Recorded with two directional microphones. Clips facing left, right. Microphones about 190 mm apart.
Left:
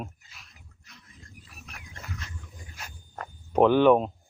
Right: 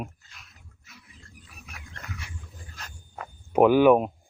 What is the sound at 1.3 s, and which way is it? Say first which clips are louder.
Wild animals: even; centre (ahead or behind).